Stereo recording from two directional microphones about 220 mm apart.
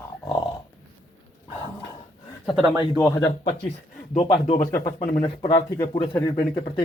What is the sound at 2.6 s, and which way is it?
Speech, 5° right (ahead or behind).